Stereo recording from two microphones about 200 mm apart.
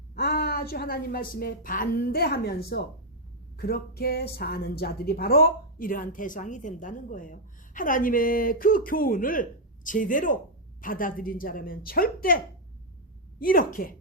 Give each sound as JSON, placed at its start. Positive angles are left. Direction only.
{"t": 0.1, "sound": "a woman's voice", "side_deg": 50}
{"t": 13.4, "sound": "a woman's voice", "side_deg": 45}